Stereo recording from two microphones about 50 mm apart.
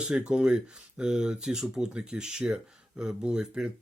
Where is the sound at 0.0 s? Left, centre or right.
Centre.